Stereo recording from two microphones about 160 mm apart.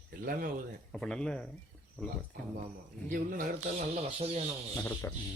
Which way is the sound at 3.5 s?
45° right (ahead or behind).